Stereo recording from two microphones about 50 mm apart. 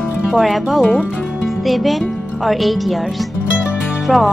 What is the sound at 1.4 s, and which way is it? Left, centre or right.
Speech, centre.